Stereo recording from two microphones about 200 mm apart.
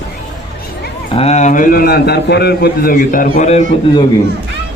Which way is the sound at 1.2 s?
35° left (ahead or behind).